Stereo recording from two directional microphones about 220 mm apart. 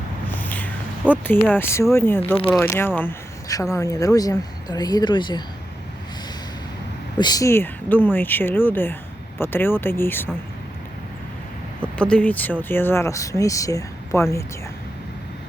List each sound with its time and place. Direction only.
0.3 s speech: 10° left (ahead or behind)
7.2 s speech: 15° left (ahead or behind)
11.8 s speech: 5° left (ahead or behind)